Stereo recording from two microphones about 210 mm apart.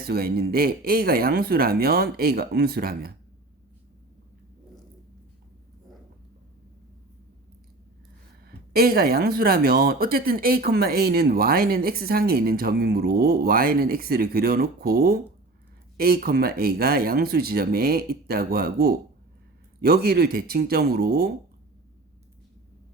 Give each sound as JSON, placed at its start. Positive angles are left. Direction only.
{"t": 0.0, "sound": "speech", "side_deg": -45}
{"t": 8.4, "sound": "speech", "side_deg": -45}